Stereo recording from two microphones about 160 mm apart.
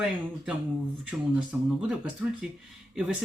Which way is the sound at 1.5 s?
10° right (ahead or behind).